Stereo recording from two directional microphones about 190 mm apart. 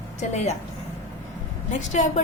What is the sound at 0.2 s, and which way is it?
Speech, 35° left (ahead or behind).